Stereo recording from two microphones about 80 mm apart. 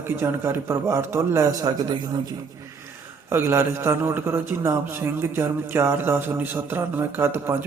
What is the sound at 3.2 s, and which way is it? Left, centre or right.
A man's voice, right.